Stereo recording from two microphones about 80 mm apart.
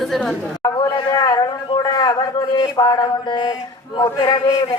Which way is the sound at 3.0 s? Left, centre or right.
Left.